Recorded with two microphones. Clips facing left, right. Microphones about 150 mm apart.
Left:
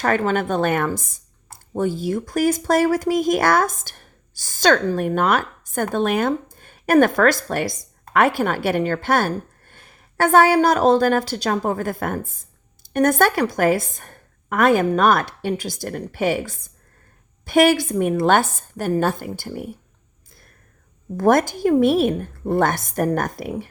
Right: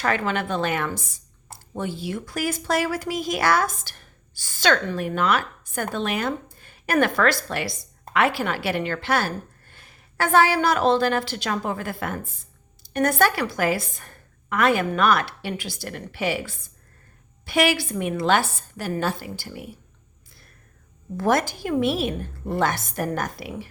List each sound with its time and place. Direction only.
0.0 s a woman's voice: 45° left (ahead or behind)
21.2 s a woman's voice: 50° left (ahead or behind)